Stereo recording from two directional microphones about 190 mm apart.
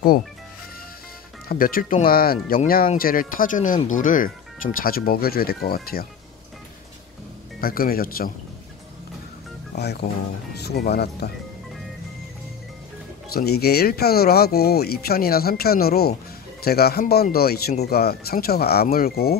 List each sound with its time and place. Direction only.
1.5 s speech: 50° left (ahead or behind)
7.6 s speech: 50° left (ahead or behind)
9.8 s speech: 60° left (ahead or behind)
13.3 s speech: 55° left (ahead or behind)